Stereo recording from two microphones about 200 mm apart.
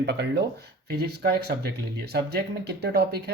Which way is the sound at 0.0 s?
55° right (ahead or behind).